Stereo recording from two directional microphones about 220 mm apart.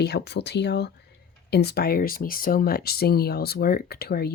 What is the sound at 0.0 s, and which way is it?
Speech, 50° left (ahead or behind).